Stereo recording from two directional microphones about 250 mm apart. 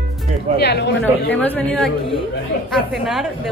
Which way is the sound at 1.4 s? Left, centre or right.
Centre.